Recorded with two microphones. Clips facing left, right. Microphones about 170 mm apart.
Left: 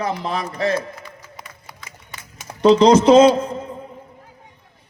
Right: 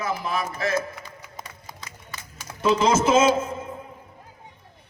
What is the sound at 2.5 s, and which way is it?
Speech, 30° left (ahead or behind).